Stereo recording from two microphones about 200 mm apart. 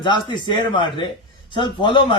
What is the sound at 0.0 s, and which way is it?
A man's voice, 25° left (ahead or behind).